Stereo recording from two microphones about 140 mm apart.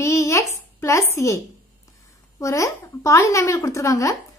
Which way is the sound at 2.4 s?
20° left (ahead or behind).